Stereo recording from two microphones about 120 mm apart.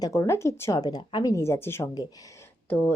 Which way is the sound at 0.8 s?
35° left (ahead or behind).